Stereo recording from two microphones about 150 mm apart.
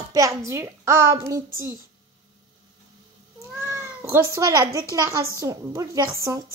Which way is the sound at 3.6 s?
15° right (ahead or behind).